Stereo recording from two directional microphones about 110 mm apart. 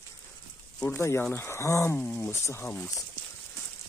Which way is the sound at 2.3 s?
25° left (ahead or behind).